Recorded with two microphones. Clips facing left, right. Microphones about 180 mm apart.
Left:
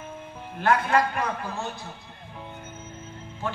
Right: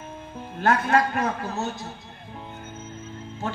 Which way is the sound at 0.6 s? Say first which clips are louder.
Right 1 dB; 45° right (ahead or behind).